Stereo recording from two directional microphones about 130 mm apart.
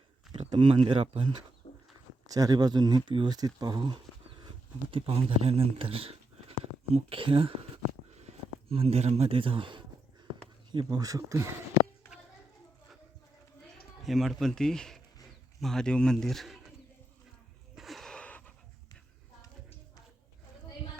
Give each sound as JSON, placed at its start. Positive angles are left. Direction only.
{"t": 0.5, "sound": "speech", "side_deg": -45}
{"t": 1.6, "sound": "bird", "side_deg": 45}
{"t": 2.2, "sound": "speech", "side_deg": -30}
{"t": 8.7, "sound": "speech", "side_deg": -50}
{"t": 14.0, "sound": "speech", "side_deg": 0}
{"t": 17.7, "sound": "a sound", "side_deg": 0}